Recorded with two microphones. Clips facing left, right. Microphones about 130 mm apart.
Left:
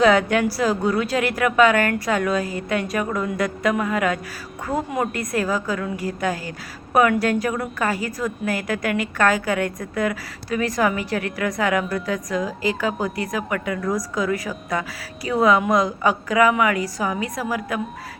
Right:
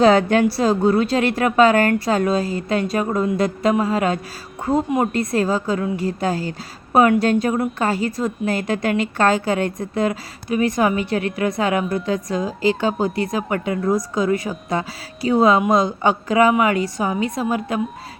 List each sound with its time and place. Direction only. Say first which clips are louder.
0.0 s a woman's voice: right 3 dB; 30° right (ahead or behind)